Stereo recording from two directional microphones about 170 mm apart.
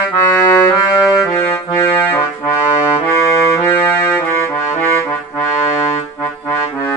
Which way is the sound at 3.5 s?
15° left (ahead or behind).